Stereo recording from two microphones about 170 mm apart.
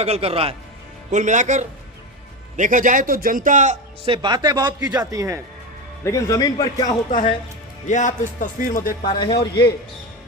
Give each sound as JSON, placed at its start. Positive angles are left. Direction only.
{"t": 0.0, "sound": "a man's voice", "side_deg": -35}
{"t": 1.1, "sound": "a man's voice", "side_deg": -45}
{"t": 4.1, "sound": "speech", "side_deg": -25}
{"t": 6.1, "sound": "a man's voice", "side_deg": 20}
{"t": 7.9, "sound": "speech", "side_deg": 45}
{"t": 9.0, "sound": "a man's voice", "side_deg": 25}